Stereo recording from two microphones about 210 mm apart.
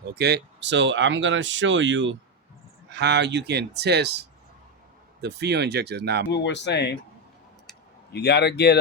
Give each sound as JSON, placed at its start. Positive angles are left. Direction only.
{"t": 0.1, "sound": "speech", "side_deg": -50}
{"t": 5.2, "sound": "speech", "side_deg": -55}
{"t": 6.3, "sound": "speech", "side_deg": 55}
{"t": 8.1, "sound": "speech", "side_deg": 50}